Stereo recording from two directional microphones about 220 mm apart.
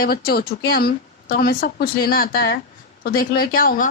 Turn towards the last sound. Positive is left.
turn(degrees=40)  # may be behind; listen again after turning